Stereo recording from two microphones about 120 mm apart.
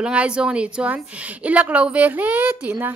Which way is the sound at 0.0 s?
10° right (ahead or behind).